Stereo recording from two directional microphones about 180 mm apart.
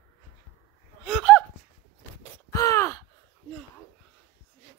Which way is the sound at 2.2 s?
15° left (ahead or behind).